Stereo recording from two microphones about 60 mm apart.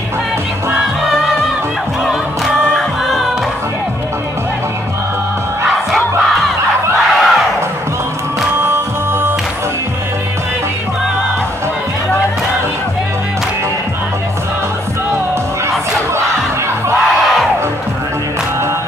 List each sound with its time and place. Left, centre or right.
2.0 s music: centre
5.9 s battle cry: centre
8.6 s music: right